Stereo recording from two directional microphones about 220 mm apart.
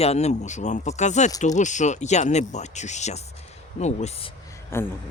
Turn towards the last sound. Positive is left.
turn(degrees=10)  # may be behind; listen again after turning